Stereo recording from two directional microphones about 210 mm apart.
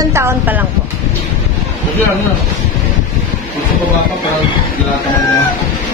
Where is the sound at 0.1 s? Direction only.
10° right (ahead or behind).